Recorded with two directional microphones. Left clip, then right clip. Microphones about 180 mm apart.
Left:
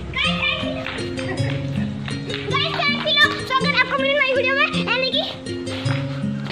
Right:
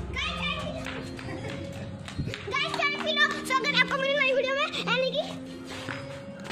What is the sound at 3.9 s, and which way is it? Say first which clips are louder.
Music: left 7 dB; 55° right (ahead or behind).